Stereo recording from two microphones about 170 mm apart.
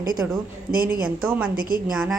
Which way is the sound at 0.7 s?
60° right (ahead or behind).